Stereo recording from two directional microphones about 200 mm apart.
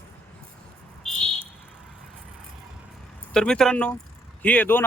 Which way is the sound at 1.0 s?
Centre (ahead or behind).